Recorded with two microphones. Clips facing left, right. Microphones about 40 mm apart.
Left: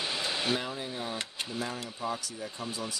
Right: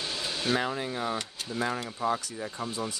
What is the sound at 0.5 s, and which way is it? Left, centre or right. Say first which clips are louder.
Speech: right 5 dB; right.